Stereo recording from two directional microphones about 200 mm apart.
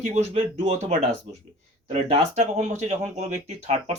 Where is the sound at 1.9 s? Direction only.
35° right (ahead or behind).